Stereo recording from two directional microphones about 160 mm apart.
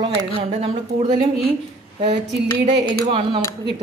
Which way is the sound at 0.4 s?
35° right (ahead or behind).